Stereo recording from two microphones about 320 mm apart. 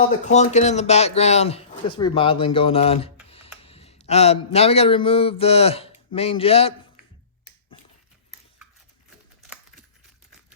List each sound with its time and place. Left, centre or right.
0.3 s speech: left
3.2 s a sound: centre
3.6 s speech: centre